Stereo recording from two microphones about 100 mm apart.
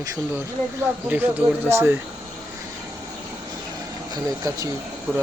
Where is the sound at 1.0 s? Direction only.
15° right (ahead or behind).